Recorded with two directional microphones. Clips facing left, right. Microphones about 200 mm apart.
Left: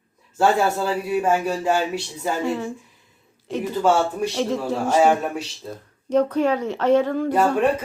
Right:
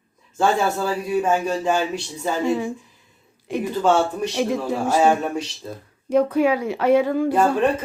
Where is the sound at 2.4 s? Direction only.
15° right (ahead or behind).